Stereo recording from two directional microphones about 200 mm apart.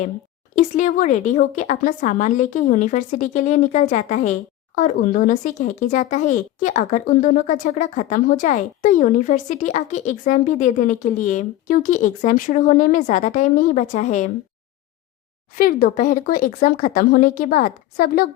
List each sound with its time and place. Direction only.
0.5 s speech: 40° left (ahead or behind)
15.5 s speech: 45° left (ahead or behind)